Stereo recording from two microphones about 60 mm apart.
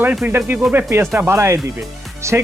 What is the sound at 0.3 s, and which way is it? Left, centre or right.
Speech, right.